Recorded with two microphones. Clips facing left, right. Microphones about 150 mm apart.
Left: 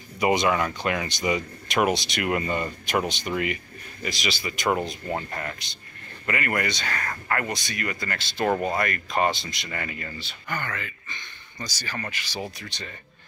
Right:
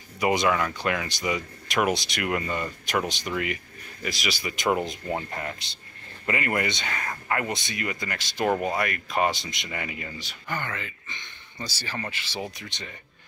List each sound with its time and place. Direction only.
0.2 s speech: centre (ahead or behind)
4.0 s speech: 5° right (ahead or behind); by 12.9 s 20° right (ahead or behind)